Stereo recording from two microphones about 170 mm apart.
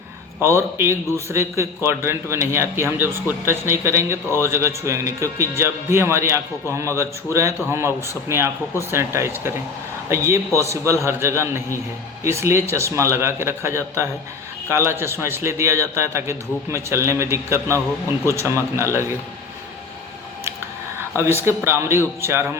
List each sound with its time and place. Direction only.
0.3 s a man's voice: 15° right (ahead or behind)
21.4 s a man's voice: 15° right (ahead or behind)